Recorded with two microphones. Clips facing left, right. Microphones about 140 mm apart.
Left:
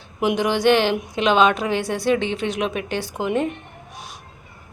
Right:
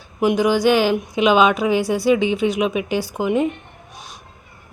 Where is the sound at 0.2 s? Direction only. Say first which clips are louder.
Right 3 dB; 5° right (ahead or behind).